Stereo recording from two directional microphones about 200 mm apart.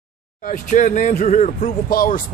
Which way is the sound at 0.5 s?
40° left (ahead or behind).